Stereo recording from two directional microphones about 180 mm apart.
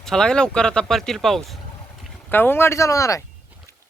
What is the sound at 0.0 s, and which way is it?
Speech, 5° left (ahead or behind).